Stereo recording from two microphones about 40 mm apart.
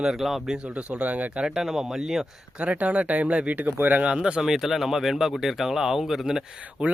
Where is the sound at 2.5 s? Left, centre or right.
Right.